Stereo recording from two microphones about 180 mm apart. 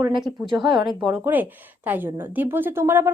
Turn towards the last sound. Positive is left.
turn(degrees=-15)  # may be behind; listen again after turning